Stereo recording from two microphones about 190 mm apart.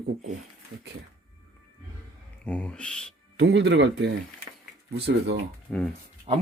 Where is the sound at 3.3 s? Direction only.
65° right (ahead or behind).